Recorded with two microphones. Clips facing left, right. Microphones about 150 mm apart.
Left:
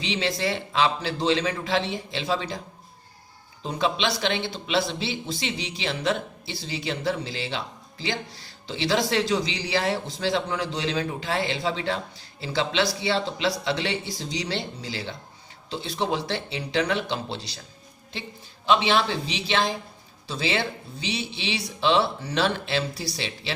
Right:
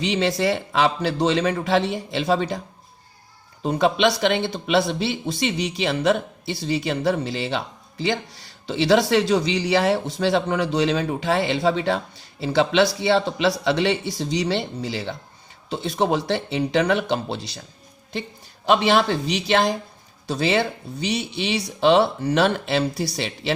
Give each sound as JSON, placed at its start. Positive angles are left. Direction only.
{"t": 0.0, "sound": "speech", "side_deg": -55}
{"t": 3.6, "sound": "speech", "side_deg": -55}
{"t": 18.7, "sound": "speech", "side_deg": -50}